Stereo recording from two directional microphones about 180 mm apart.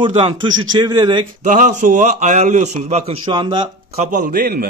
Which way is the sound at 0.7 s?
25° right (ahead or behind).